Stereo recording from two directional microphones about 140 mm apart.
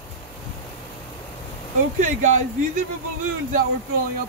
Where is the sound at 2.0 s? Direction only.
65° right (ahead or behind).